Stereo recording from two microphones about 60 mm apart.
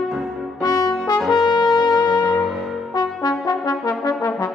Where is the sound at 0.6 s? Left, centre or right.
Left.